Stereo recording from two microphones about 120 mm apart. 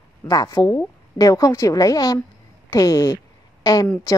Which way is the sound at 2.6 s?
30° left (ahead or behind).